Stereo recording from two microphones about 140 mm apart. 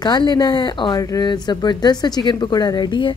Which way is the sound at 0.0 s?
30° left (ahead or behind).